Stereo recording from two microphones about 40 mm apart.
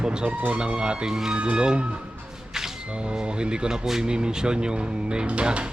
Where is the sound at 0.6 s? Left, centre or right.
Right.